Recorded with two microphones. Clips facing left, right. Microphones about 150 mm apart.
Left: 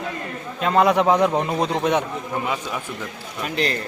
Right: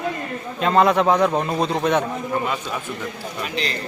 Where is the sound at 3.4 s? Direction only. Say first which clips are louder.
Left 5 dB; 50° left (ahead or behind).